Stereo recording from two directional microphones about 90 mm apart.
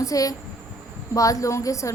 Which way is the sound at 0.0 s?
40° left (ahead or behind).